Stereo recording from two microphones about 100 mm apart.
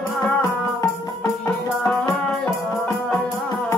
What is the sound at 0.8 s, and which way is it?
Music, 30° left (ahead or behind).